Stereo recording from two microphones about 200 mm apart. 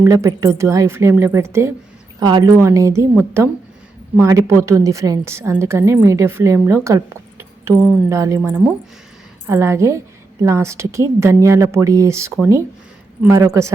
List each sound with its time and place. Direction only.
0.0 s a woman's voice: 15° right (ahead or behind)